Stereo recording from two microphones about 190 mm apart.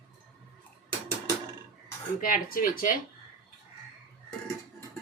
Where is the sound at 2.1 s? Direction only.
50° left (ahead or behind).